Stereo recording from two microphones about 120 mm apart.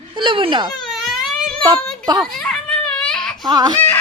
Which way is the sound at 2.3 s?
5° left (ahead or behind).